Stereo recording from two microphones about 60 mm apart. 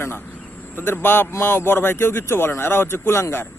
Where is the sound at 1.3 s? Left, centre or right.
Left.